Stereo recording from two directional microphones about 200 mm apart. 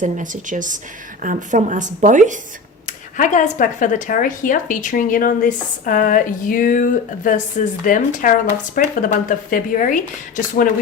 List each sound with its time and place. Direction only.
0.0 s speech: 40° right (ahead or behind)
2.8 s speech: 40° left (ahead or behind)